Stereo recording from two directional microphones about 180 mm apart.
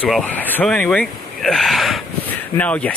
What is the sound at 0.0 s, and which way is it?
Speech, 5° left (ahead or behind).